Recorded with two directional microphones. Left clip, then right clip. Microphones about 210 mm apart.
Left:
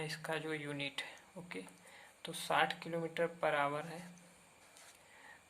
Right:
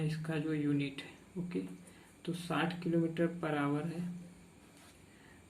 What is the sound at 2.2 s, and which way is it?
Speech, 50° left (ahead or behind).